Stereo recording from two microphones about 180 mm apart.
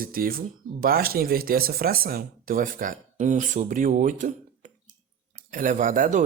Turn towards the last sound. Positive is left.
turn(degrees=-45)  # may be behind; listen again after turning